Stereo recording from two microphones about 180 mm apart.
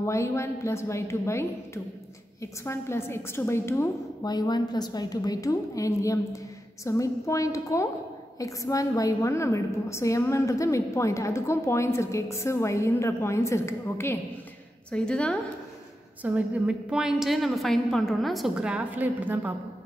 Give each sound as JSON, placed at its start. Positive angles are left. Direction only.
{"t": 0.0, "sound": "a woman's voice", "side_deg": 15}
{"t": 16.2, "sound": "a woman's voice", "side_deg": -10}